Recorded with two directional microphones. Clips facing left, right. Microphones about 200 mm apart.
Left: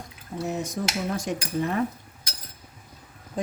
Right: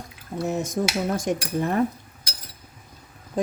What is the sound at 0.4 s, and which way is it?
Speech, 45° right (ahead or behind).